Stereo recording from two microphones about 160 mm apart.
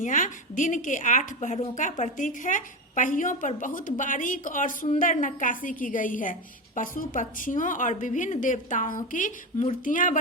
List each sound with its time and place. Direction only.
0.0 s a woman's voice: 55° left (ahead or behind)